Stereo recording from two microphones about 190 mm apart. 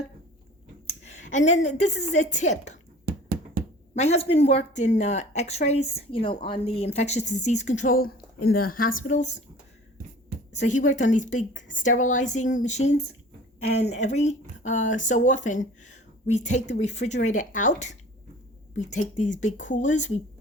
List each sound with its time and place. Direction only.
0.9 s a woman's voice: 40° left (ahead or behind)
3.9 s speech: 35° left (ahead or behind)
10.5 s speech: 40° left (ahead or behind)
13.9 s speech: 35° left (ahead or behind)